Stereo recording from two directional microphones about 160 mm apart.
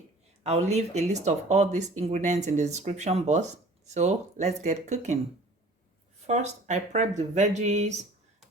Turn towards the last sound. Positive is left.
turn(degrees=-45)  # may be behind; listen again after turning